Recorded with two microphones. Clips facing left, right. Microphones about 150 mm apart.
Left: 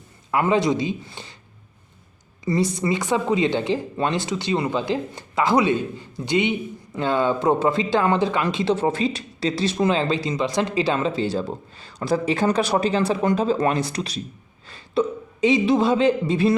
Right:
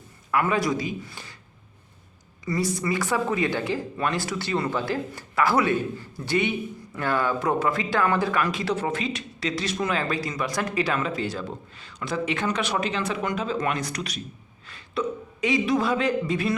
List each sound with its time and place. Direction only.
0.3 s speech: 25° left (ahead or behind)
2.4 s speech: 20° left (ahead or behind)